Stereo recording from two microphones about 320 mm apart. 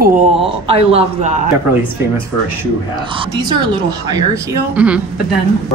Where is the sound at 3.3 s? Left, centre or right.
Centre.